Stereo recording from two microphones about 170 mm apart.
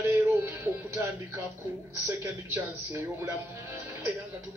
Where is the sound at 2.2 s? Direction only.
15° right (ahead or behind).